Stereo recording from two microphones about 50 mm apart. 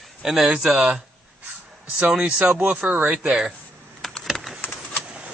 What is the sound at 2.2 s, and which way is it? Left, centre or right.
Speech, right.